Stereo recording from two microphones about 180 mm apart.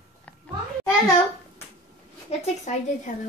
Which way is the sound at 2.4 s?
40° left (ahead or behind).